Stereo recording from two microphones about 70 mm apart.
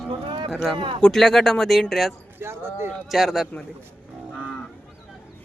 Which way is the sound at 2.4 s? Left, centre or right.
Right.